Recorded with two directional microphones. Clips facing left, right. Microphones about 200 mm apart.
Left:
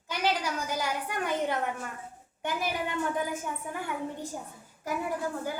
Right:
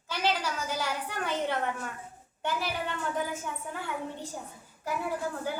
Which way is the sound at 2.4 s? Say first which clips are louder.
Left 1 dB; 15° left (ahead or behind).